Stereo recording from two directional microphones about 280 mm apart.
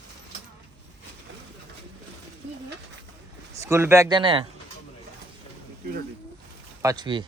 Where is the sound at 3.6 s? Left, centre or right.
Centre.